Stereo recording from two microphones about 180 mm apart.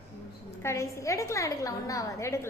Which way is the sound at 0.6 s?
15° left (ahead or behind).